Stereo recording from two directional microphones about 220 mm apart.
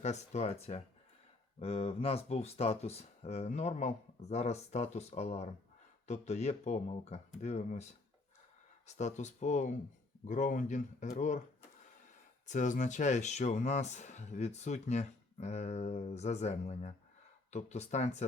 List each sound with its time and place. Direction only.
0.0 s speech: 30° left (ahead or behind)
8.9 s speech: 30° left (ahead or behind)
12.5 s speech: 35° left (ahead or behind)